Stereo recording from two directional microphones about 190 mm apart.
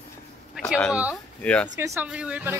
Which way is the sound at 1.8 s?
10° right (ahead or behind).